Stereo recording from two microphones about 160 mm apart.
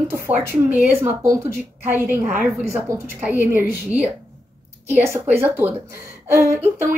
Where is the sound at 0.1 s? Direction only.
15° right (ahead or behind).